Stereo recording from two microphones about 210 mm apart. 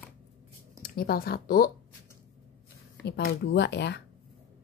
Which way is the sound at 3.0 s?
50° left (ahead or behind).